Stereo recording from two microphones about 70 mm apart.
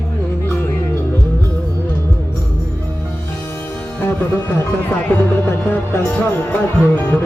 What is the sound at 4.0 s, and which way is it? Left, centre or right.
Music, left.